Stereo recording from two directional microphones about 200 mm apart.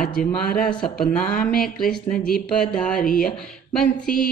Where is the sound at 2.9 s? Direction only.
45° left (ahead or behind).